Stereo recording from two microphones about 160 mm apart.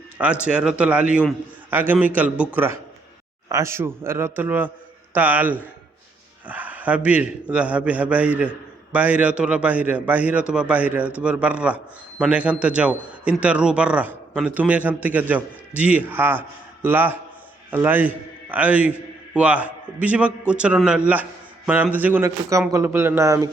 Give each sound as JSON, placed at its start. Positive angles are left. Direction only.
{"t": 0.4, "sound": "a man's voice", "side_deg": -5}